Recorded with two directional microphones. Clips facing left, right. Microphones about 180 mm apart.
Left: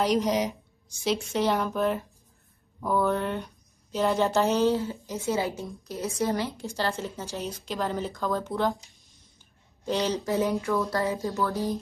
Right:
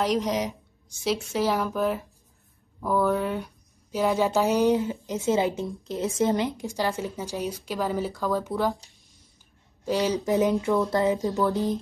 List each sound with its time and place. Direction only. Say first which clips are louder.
0.0 s a woman's voice: left 1 dB; centre (ahead or behind)
9.8 s speech: right 2 dB; 5° right (ahead or behind)
10.1 s speech: right 3 dB; 15° right (ahead or behind)